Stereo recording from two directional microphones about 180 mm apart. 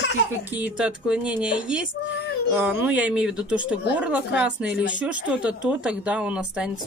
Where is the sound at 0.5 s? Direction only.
10° right (ahead or behind).